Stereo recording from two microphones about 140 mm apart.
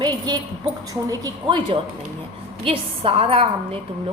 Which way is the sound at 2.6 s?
40° right (ahead or behind).